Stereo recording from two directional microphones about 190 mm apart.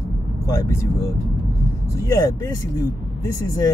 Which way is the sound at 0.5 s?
15° left (ahead or behind).